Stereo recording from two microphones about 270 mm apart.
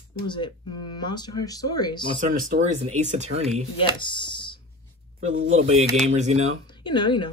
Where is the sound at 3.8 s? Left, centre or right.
Centre.